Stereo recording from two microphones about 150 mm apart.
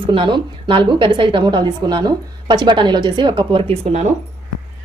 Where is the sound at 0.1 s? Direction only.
35° right (ahead or behind).